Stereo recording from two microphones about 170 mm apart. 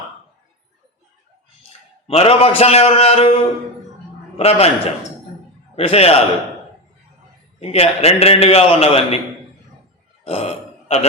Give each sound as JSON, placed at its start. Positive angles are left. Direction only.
{"t": 2.0, "sound": "a man's voice", "side_deg": 35}
{"t": 4.4, "sound": "a man's voice", "side_deg": 35}
{"t": 5.7, "sound": "a man's voice", "side_deg": 35}
{"t": 7.6, "sound": "a man's voice", "side_deg": 35}
{"t": 10.2, "sound": "a sound", "side_deg": 40}